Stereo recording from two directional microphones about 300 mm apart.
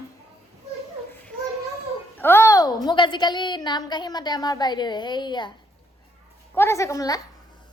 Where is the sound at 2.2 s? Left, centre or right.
Centre.